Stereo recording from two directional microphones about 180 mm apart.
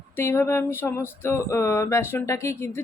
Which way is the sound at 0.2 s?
15° left (ahead or behind).